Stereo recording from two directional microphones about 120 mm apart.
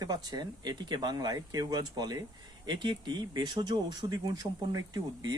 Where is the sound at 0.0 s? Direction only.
35° right (ahead or behind).